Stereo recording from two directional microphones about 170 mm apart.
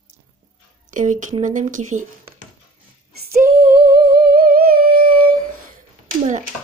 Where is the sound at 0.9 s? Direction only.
45° right (ahead or behind).